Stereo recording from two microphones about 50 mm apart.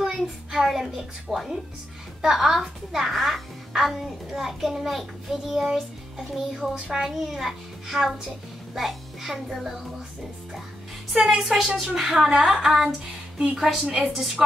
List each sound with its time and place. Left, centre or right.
0.0 s a child's voice: centre
11.2 s a child's voice: centre
13.8 s a woman's voice: right
14.1 s a child's voice: centre